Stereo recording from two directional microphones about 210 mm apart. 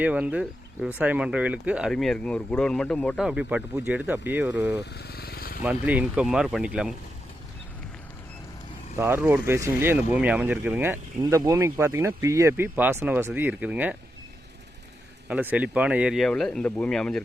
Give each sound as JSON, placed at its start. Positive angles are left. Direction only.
{"t": 0.0, "sound": "speech", "side_deg": -5}
{"t": 4.8, "sound": "motorcycle", "side_deg": 50}
{"t": 5.6, "sound": "speech", "side_deg": -5}
{"t": 9.0, "sound": "speech", "side_deg": -10}
{"t": 15.3, "sound": "speech", "side_deg": -5}